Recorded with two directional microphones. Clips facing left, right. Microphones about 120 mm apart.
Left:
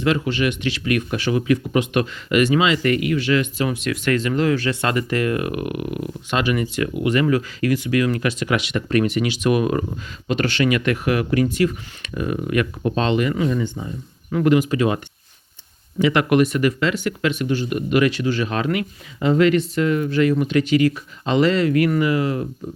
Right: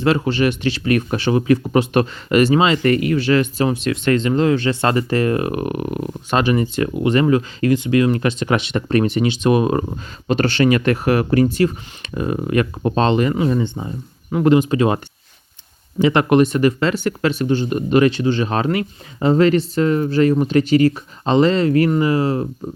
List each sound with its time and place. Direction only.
0.0 s speech: 35° right (ahead or behind)